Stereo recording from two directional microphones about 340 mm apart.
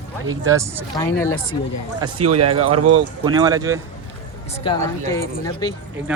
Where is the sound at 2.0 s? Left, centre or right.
Centre.